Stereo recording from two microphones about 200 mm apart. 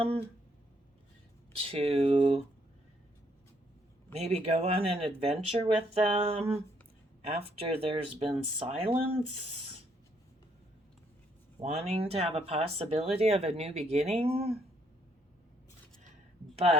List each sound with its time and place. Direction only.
1.5 s speech: 30° right (ahead or behind)
4.1 s speech: 30° right (ahead or behind)
11.6 s speech: 30° right (ahead or behind)